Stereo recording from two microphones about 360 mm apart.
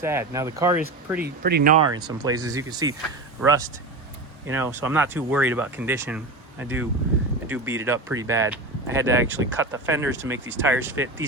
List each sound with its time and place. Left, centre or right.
0.0 s speech: centre
1.2 s speech: right
1.9 s speech: centre